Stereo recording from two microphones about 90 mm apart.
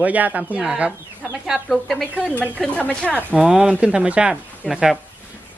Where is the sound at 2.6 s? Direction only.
15° left (ahead or behind).